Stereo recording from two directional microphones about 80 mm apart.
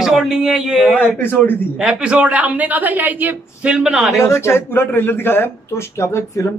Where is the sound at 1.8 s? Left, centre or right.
Centre.